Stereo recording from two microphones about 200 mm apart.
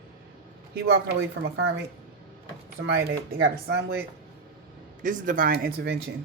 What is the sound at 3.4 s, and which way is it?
Speech, 55° right (ahead or behind).